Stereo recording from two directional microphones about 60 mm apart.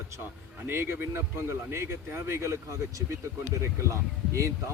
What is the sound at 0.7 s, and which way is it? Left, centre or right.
Speech, right.